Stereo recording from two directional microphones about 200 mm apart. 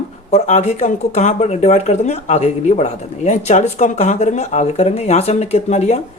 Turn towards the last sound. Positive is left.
turn(degrees=35)  # may be behind; listen again after turning